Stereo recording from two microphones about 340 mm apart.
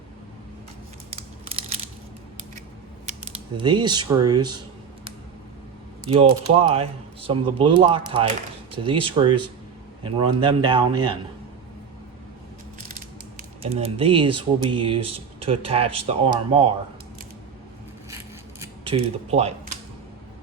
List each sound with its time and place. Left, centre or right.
1.1 s scissors: centre
3.6 s speech: centre
6.1 s speech: centre
13.6 s speech: centre
18.6 s a sound: centre